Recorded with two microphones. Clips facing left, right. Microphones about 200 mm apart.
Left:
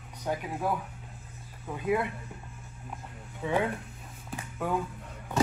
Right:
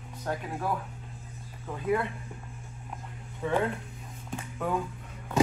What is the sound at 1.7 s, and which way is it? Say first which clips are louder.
Speech: even; 15° left (ahead or behind).